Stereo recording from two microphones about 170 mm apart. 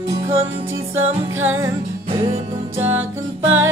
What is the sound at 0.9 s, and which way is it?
Music, 15° right (ahead or behind).